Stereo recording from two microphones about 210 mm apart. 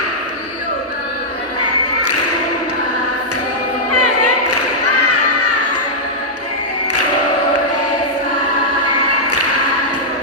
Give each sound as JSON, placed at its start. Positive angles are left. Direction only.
{"t": 3.9, "sound": "choir", "side_deg": 90}